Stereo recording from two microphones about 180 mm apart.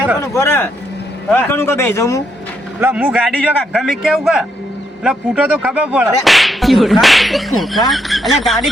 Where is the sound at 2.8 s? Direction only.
10° right (ahead or behind).